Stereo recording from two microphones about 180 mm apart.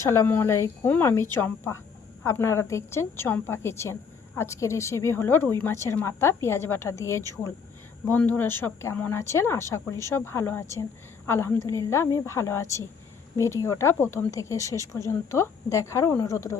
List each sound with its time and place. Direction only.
0.0 s speech: 15° left (ahead or behind)